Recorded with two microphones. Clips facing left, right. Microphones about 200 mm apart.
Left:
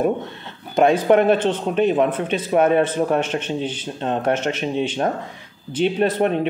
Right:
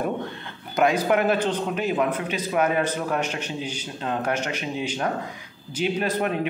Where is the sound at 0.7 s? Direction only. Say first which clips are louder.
Left 6 dB; 30° left (ahead or behind).